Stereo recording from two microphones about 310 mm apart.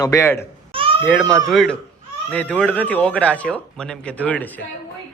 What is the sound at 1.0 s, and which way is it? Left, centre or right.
Speech, centre.